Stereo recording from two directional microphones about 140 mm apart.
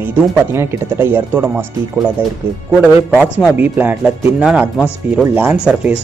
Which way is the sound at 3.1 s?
5° right (ahead or behind).